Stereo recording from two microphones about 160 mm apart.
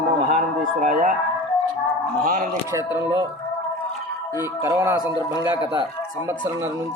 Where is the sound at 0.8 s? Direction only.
55° right (ahead or behind).